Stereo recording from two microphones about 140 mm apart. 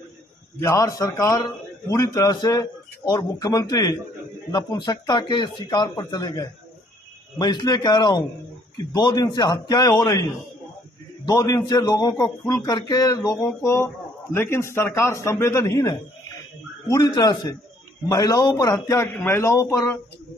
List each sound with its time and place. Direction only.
0.6 s a man's voice: 25° left (ahead or behind)
11.2 s a man's voice: 30° left (ahead or behind)